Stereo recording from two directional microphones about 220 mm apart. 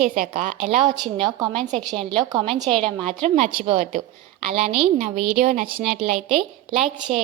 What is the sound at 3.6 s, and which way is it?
Speech, 30° right (ahead or behind).